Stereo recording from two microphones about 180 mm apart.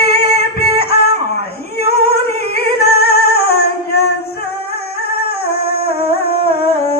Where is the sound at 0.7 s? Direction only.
60° left (ahead or behind).